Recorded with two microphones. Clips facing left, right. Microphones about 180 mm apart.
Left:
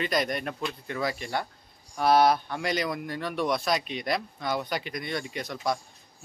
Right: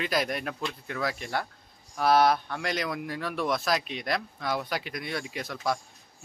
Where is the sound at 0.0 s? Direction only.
5° right (ahead or behind).